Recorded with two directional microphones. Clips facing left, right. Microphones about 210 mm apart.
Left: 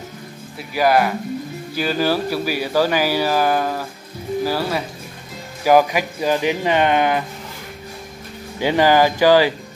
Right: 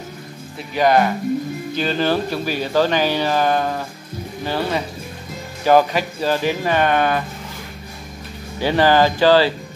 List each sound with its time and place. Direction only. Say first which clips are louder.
0.7 s speech: right 1 dB; 5° left (ahead or behind)
8.5 s speech: even; 15° left (ahead or behind)